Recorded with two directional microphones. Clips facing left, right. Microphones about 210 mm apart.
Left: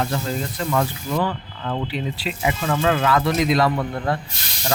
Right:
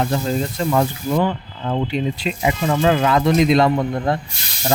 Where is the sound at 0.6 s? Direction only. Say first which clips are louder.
Right 3 dB; 25° right (ahead or behind).